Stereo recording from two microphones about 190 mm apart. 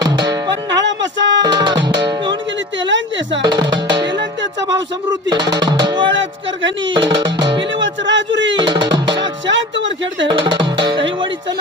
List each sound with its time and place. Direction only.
0.0 s music: 20° right (ahead or behind)
0.7 s music: 70° right (ahead or behind)
1.4 s music: 20° right (ahead or behind)
3.4 s music: 25° right (ahead or behind)
7.8 s a sound: 75° right (ahead or behind)
8.5 s music: 25° right (ahead or behind)
10.2 s music: 25° right (ahead or behind)